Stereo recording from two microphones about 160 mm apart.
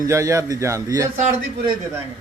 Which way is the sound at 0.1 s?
20° right (ahead or behind).